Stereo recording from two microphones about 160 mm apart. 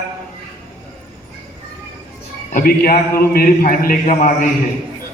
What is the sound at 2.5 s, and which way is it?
A man's voice, 60° left (ahead or behind).